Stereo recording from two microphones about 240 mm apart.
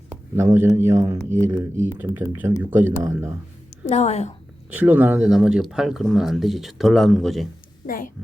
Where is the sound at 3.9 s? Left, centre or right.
Left.